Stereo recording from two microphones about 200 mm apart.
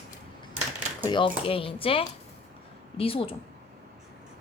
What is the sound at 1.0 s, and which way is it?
Speech, 25° left (ahead or behind).